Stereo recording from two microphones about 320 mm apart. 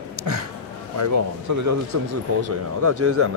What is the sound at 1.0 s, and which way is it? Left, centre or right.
Speech, right.